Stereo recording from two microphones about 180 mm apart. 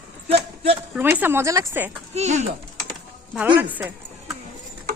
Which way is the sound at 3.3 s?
10° right (ahead or behind).